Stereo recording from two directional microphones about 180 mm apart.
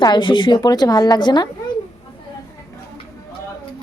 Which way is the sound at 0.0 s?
25° left (ahead or behind).